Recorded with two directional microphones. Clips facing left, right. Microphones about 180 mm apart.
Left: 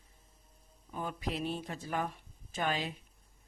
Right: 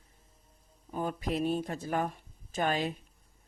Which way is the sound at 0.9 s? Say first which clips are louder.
Right 5 dB; 40° right (ahead or behind).